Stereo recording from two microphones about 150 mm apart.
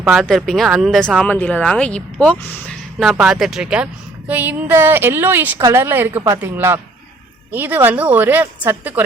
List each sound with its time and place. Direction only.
0.0 s a woman's voice: centre (ahead or behind)